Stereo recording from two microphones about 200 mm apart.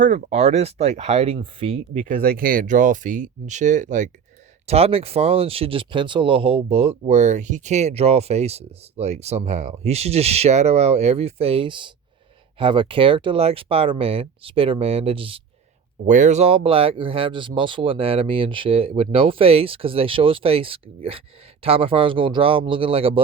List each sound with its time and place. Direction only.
0.0 s speech: 35° right (ahead or behind)
16.0 s speech: 40° right (ahead or behind)